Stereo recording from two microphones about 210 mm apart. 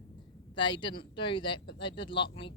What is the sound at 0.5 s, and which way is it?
Speech, 20° left (ahead or behind).